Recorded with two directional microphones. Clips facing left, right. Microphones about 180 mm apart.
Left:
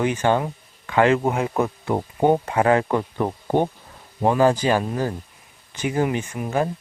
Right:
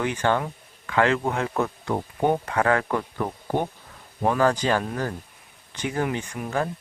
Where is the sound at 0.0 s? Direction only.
20° left (ahead or behind).